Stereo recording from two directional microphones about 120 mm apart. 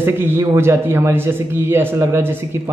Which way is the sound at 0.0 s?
20° right (ahead or behind).